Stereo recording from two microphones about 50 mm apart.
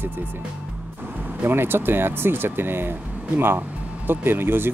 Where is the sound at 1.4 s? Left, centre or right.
Right.